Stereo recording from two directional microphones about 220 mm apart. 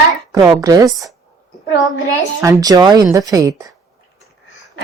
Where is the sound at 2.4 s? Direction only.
15° right (ahead or behind).